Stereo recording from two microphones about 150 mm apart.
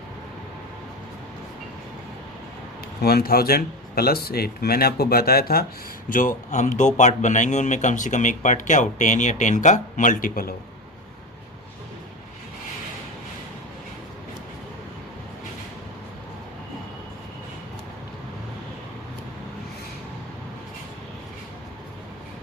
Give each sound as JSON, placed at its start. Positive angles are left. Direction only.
{"t": 3.0, "sound": "speech", "side_deg": 90}
{"t": 6.1, "sound": "a man's voice", "side_deg": 65}